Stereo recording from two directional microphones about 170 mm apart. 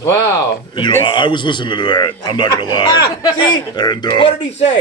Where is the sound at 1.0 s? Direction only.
30° left (ahead or behind).